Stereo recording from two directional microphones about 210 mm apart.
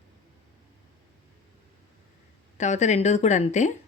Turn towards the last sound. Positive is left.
turn(degrees=35)  # may be behind; listen again after turning